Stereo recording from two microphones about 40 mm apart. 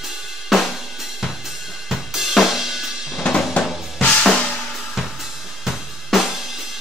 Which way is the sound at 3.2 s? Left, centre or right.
Left.